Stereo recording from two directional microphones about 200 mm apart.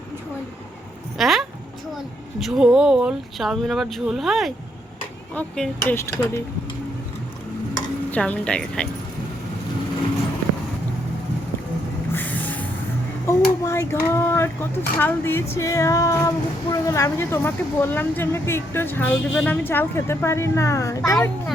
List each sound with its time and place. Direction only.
1.2 s speech: centre (ahead or behind)
8.1 s speech: 5° left (ahead or behind)
12.1 s vehicle: 10° left (ahead or behind)
13.2 s speech: 15° left (ahead or behind)